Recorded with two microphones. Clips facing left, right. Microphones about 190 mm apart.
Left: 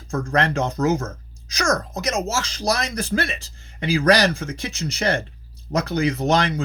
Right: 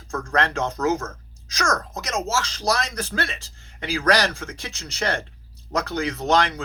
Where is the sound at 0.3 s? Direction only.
10° left (ahead or behind).